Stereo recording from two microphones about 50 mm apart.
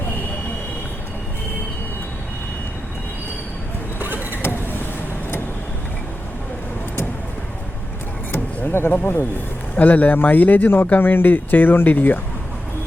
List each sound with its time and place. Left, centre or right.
4.0 s vehicle: right
8.7 s speech: left
9.7 s speech: left